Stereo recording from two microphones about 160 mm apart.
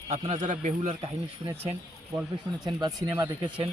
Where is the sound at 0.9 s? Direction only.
35° right (ahead or behind).